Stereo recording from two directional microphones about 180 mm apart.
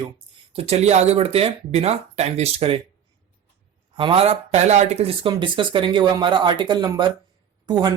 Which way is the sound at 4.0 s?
30° right (ahead or behind).